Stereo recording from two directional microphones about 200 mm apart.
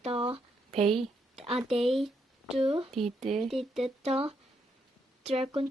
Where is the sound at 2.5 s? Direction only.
30° right (ahead or behind).